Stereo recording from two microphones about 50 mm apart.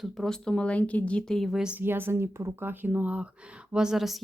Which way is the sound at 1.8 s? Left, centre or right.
Right.